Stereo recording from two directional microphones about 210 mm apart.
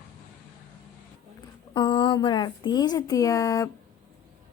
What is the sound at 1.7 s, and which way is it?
A woman's voice, 20° left (ahead or behind).